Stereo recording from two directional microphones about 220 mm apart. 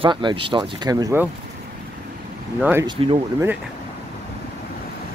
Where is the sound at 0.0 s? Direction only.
20° right (ahead or behind).